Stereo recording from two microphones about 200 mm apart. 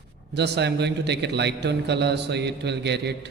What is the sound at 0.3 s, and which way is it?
A man's voice, 60° right (ahead or behind).